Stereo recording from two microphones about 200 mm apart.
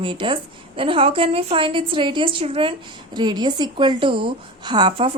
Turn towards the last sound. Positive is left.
turn(degrees=-25)  # may be behind; listen again after turning